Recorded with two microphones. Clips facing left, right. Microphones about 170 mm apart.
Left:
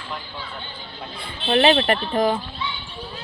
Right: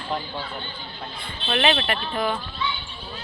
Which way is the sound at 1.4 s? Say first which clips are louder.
Left 6 dB; 35° left (ahead or behind).